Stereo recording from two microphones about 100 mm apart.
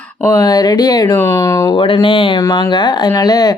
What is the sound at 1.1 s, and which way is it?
Speech, 30° left (ahead or behind).